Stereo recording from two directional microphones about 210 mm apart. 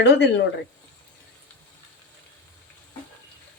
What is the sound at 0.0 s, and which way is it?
Speech, 55° left (ahead or behind).